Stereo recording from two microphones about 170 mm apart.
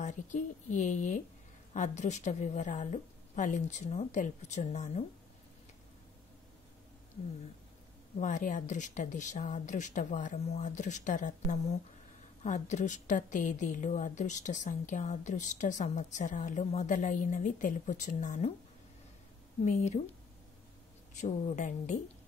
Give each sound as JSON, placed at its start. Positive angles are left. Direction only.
{"t": 0.0, "sound": "a woman's voice", "side_deg": 45}
{"t": 8.2, "sound": "a woman's voice", "side_deg": 45}
{"t": 19.6, "sound": "a woman's voice", "side_deg": 40}
{"t": 21.1, "sound": "a woman's voice", "side_deg": 45}